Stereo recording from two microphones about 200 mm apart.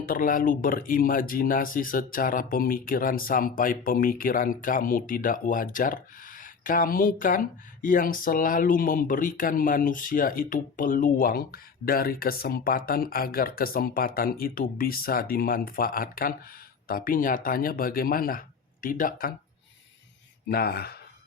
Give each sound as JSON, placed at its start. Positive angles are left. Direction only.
{"t": 0.0, "sound": "speech", "side_deg": 45}
{"t": 20.5, "sound": "speech", "side_deg": 50}